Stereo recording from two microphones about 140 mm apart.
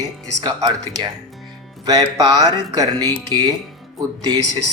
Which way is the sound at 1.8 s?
25° right (ahead or behind).